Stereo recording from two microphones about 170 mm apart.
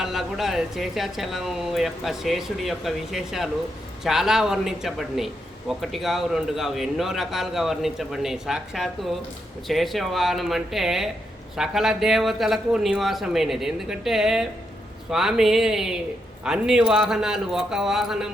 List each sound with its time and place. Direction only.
0.0 s a man's voice: centre (ahead or behind)